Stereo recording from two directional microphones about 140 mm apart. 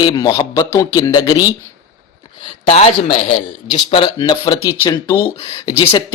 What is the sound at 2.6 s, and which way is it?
A man's voice, 45° left (ahead or behind).